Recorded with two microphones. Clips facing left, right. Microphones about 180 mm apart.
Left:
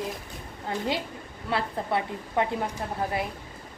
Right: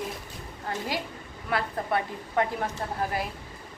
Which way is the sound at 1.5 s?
25° left (ahead or behind).